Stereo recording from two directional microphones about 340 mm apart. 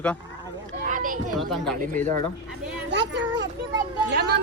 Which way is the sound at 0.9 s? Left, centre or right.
Right.